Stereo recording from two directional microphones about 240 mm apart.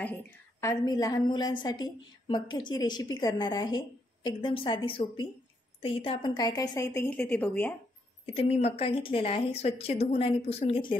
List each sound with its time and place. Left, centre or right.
0.6 s a woman's voice: centre
8.3 s a woman's voice: left